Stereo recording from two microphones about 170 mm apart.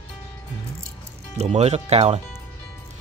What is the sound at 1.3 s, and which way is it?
Speech, 40° right (ahead or behind).